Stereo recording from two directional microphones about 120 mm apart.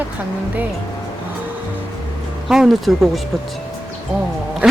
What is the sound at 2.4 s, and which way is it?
Speech, centre (ahead or behind).